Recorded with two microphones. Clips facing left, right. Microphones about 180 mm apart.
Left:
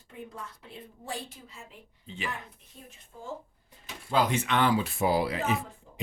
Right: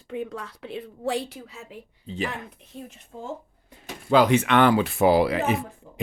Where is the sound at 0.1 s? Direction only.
80° right.